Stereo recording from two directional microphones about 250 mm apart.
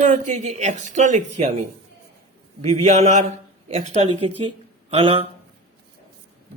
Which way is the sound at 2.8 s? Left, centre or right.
Right.